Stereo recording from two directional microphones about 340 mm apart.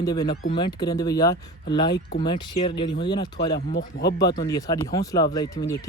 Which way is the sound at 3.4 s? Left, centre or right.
Left.